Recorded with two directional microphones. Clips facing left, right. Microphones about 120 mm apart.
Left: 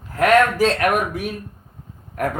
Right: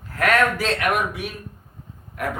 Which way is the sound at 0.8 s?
45° left (ahead or behind).